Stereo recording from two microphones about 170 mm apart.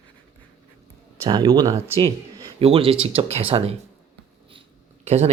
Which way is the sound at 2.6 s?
35° right (ahead or behind).